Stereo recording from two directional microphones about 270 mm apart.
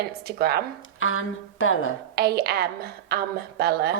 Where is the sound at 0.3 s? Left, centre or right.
Right.